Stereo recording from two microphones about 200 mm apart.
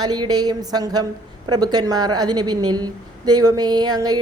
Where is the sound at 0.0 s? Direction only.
20° right (ahead or behind).